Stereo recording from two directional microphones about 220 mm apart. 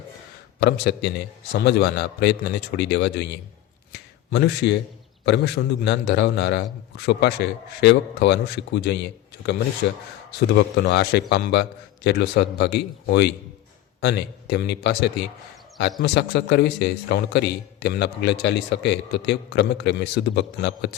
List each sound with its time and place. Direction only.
0.6 s a man's voice: 50° left (ahead or behind)
3.9 s a sound: 50° left (ahead or behind)
5.2 s a man's voice: 50° left (ahead or behind)